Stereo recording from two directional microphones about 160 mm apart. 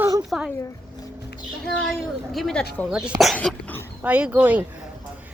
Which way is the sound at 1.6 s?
5° left (ahead or behind).